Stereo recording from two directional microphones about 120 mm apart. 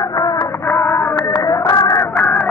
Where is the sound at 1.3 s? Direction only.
35° left (ahead or behind).